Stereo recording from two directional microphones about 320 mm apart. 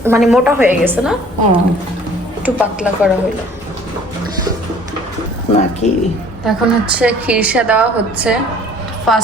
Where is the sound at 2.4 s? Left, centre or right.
Centre.